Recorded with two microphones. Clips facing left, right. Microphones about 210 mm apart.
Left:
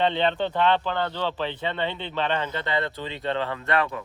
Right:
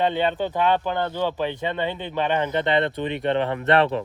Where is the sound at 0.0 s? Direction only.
10° right (ahead or behind).